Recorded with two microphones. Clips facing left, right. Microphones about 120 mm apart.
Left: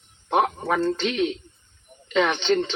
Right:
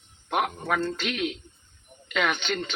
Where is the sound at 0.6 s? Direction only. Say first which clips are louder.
Left 4 dB; 30° left (ahead or behind).